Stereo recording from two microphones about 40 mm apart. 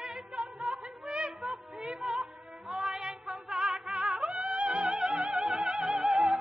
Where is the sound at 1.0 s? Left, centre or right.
Centre.